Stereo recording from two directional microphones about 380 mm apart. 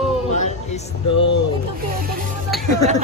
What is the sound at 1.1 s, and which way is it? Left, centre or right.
Speech, left.